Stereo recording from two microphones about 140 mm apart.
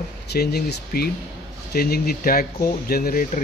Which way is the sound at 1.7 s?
90° left.